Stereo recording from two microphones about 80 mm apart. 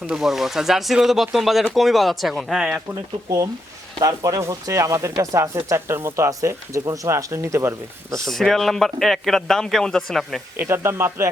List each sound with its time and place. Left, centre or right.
0.1 s speech: centre
3.2 s speech: right
8.3 s speech: centre
10.6 s speech: right